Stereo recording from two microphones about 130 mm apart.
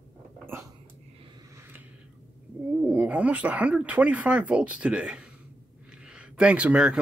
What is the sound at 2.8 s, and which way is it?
Speech, 10° right (ahead or behind).